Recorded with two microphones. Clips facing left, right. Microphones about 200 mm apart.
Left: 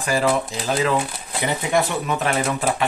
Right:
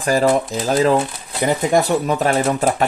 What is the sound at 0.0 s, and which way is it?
Speech, 40° right (ahead or behind).